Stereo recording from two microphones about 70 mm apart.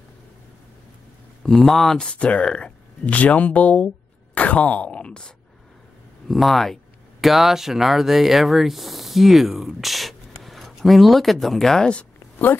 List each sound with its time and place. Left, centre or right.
1.4 s speech: centre; by 3.9 s left
4.4 s a sound: left
6.2 s speech: centre